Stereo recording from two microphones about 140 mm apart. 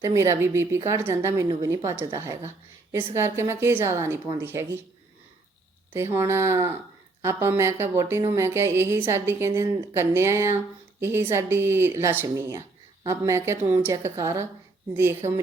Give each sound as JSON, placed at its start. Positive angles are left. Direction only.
{"t": 0.0, "sound": "a woman's voice", "side_deg": -20}
{"t": 5.9, "sound": "a woman's voice", "side_deg": -20}